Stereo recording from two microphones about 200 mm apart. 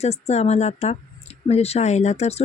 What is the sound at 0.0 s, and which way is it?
Speech, 30° left (ahead or behind).